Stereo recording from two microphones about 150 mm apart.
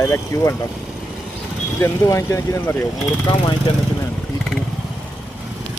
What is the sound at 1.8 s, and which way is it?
Speech, 20° left (ahead or behind).